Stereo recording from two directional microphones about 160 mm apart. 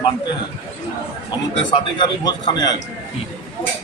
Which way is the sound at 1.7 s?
30° left (ahead or behind).